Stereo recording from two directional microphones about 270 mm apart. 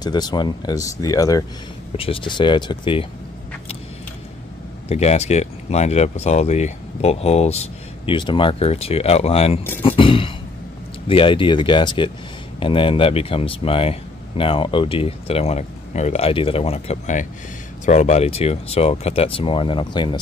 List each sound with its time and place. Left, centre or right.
0.0 s speech: centre
4.8 s speech: left
9.8 s throat clearing: centre
11.1 s speech: centre